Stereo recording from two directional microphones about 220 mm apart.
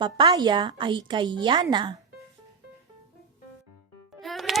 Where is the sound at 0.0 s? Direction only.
20° right (ahead or behind).